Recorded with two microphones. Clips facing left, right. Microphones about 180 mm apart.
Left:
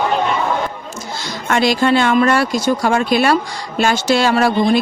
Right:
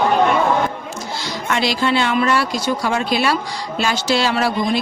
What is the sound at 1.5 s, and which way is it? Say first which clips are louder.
Speech: left 5 dB; 50° left (ahead or behind).